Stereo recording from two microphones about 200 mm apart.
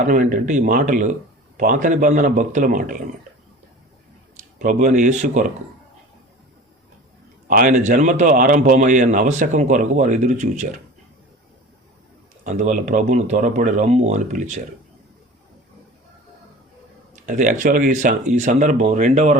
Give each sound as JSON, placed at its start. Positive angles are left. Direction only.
{"t": 0.0, "sound": "speech", "side_deg": -40}
{"t": 4.6, "sound": "speech", "side_deg": -40}
{"t": 7.4, "sound": "speech", "side_deg": -45}
{"t": 12.5, "sound": "speech", "side_deg": -40}
{"t": 17.2, "sound": "speech", "side_deg": -40}